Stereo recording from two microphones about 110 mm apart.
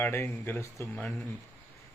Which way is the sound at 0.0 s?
20° left (ahead or behind).